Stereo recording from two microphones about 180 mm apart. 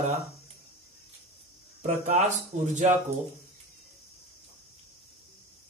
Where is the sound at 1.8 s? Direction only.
45° right (ahead or behind).